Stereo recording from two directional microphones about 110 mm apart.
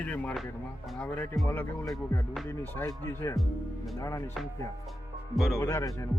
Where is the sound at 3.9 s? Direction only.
30° left (ahead or behind).